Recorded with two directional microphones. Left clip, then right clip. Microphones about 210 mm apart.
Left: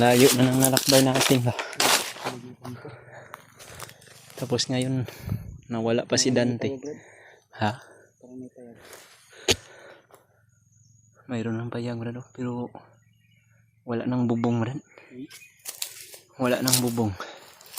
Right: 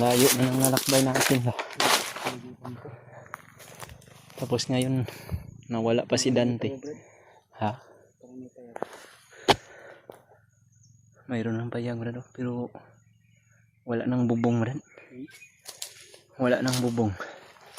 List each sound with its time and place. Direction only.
0.0 s speech: 25° left (ahead or behind)
2.0 s a sound: centre (ahead or behind)
2.6 s wild animals: 15° left (ahead or behind)
4.4 s speech: 5° left (ahead or behind)
7.5 s speech: 20° left (ahead or behind)
9.3 s a sound: 5° left (ahead or behind)
11.3 s speech: centre (ahead or behind)
15.3 s bird flight: 35° left (ahead or behind)
16.3 s speech: 5° left (ahead or behind)